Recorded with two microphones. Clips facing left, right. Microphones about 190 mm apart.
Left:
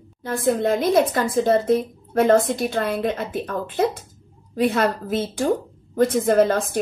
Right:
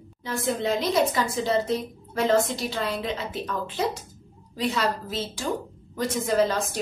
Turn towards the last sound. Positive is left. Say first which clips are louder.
# left 5 dB
turn(degrees=55)  # may be behind; listen again after turning